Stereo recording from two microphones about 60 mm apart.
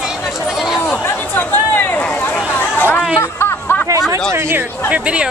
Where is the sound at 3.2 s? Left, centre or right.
Left.